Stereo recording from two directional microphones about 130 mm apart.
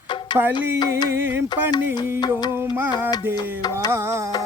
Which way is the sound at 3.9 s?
20° right (ahead or behind).